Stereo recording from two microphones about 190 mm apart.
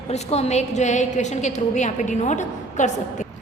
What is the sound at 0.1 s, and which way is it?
A woman's voice, 35° left (ahead or behind).